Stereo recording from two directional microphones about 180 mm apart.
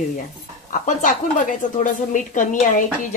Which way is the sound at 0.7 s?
45° left (ahead or behind).